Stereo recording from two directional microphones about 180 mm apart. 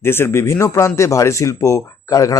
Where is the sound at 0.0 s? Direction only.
15° left (ahead or behind).